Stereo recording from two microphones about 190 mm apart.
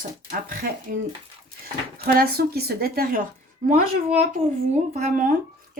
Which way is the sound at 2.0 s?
55° right (ahead or behind).